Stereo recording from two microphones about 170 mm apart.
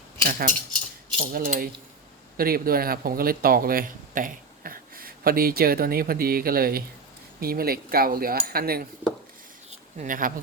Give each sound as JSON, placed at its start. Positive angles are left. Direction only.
{"t": 0.3, "sound": "speech", "side_deg": -55}
{"t": 10.0, "sound": "speech", "side_deg": -50}